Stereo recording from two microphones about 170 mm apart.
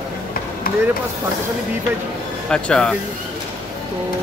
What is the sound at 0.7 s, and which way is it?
Vehicle, 60° left (ahead or behind).